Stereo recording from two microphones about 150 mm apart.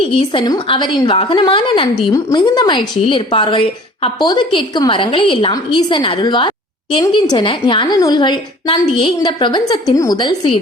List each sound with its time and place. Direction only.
0.1 s a woman's voice: 35° left (ahead or behind)